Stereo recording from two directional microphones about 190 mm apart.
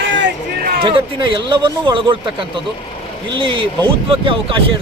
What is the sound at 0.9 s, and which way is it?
Speech, 25° right (ahead or behind).